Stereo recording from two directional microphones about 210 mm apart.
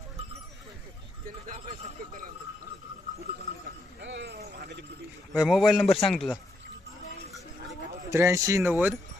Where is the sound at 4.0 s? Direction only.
55° right (ahead or behind).